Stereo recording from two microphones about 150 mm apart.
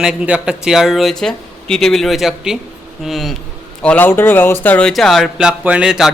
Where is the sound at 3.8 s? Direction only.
10° left (ahead or behind).